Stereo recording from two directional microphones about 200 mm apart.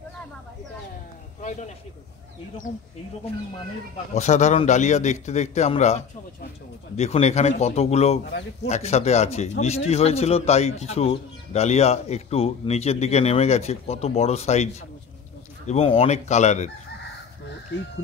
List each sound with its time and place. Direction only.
4.1 s a man's voice: 35° left (ahead or behind)